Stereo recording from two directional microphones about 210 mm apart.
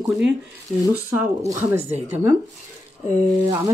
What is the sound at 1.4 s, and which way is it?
Speech, 10° right (ahead or behind).